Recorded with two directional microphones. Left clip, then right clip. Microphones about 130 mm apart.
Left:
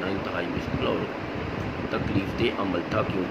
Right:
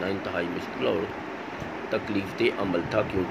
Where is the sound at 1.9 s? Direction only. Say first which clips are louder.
Right 1 dB; 20° right (ahead or behind).